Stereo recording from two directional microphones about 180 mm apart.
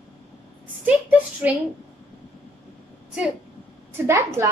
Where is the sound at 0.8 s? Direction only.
10° right (ahead or behind).